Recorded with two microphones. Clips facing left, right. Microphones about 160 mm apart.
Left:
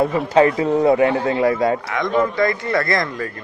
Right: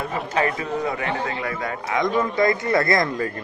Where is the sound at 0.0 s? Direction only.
30° left (ahead or behind).